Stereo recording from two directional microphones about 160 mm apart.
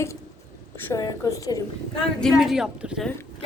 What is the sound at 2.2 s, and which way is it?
Speech, centre (ahead or behind).